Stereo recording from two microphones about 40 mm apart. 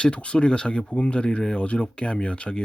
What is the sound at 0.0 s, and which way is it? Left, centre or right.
Speech, left.